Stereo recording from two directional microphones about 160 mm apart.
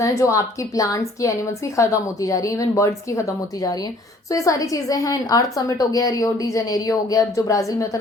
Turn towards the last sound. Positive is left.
turn(degrees=20)  # may be behind; listen again after turning